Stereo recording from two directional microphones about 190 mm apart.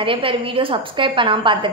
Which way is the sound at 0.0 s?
30° right (ahead or behind).